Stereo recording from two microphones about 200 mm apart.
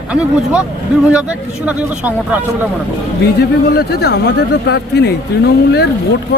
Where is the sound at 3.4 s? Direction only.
55° left (ahead or behind).